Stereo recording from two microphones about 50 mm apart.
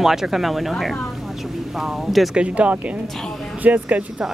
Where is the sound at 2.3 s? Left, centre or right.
Right.